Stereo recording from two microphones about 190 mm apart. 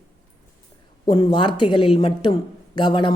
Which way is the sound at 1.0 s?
25° left (ahead or behind).